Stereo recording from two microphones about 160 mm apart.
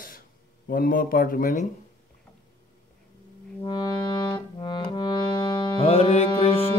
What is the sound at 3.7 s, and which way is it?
Music, 25° left (ahead or behind).